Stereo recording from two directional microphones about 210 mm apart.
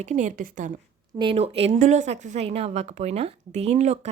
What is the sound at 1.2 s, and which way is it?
A woman's voice, 25° right (ahead or behind).